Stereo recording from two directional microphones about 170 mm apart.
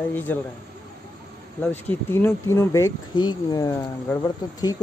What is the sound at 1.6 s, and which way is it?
Speech, 10° left (ahead or behind).